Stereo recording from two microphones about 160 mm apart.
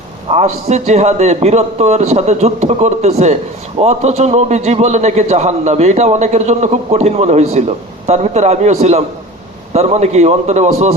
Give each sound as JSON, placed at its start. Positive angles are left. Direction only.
{"t": 0.3, "sound": "a man's voice", "side_deg": -45}